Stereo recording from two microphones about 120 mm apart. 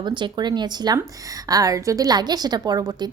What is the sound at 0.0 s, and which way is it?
A woman's voice, 40° right (ahead or behind).